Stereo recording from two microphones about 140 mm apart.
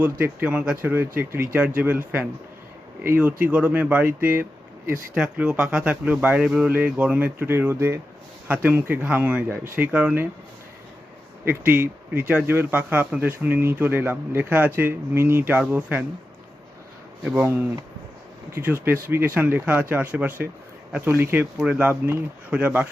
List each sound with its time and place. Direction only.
0.0 s speech: 15° right (ahead or behind)
11.4 s speech: 15° right (ahead or behind)
17.2 s speech: 15° right (ahead or behind)
18.5 s speech: 15° right (ahead or behind)